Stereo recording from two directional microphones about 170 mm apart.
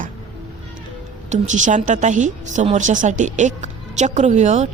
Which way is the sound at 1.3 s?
45° right (ahead or behind).